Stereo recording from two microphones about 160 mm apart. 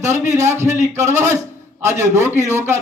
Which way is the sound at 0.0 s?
15° right (ahead or behind).